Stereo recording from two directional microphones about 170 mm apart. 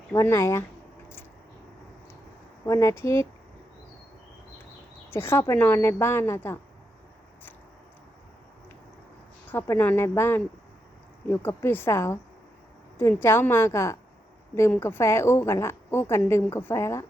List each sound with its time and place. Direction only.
0.1 s a woman's voice: 15° left (ahead or behind)
2.6 s a woman's voice: 20° left (ahead or behind)
5.1 s a woman's voice: 15° left (ahead or behind)
9.5 s a woman's voice: 10° left (ahead or behind)